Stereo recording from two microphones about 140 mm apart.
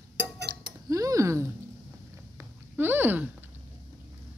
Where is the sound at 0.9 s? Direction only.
25° right (ahead or behind).